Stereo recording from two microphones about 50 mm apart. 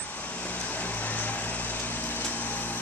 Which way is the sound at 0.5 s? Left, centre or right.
Left.